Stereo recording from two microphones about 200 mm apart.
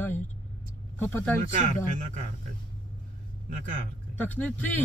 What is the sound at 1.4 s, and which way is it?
Speech, 40° right (ahead or behind).